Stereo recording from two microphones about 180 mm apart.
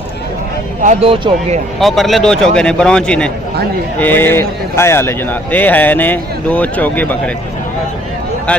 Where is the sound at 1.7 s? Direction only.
Centre (ahead or behind).